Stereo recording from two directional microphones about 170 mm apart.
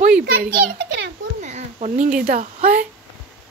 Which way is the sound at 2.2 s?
50° right (ahead or behind).